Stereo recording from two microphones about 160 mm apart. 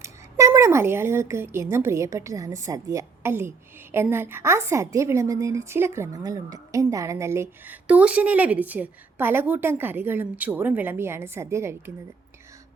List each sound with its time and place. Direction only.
0.0 s a woman's voice: 20° right (ahead or behind)